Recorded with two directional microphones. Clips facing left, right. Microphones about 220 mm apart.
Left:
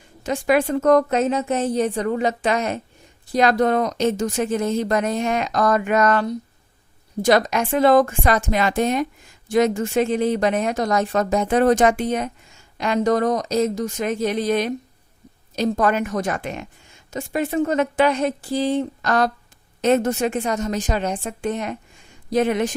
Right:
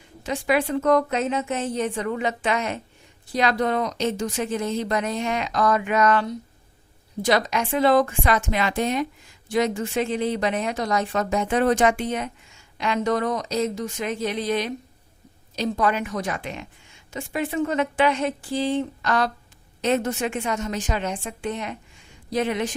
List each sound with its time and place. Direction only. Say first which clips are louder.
0.2 s a woman's voice: left 4 dB; 45° left (ahead or behind)